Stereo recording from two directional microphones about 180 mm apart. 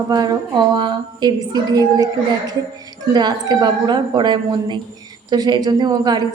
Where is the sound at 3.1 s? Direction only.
25° right (ahead or behind).